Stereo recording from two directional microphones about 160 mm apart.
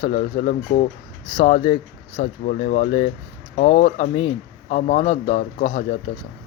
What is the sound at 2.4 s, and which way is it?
Speech, 60° left (ahead or behind).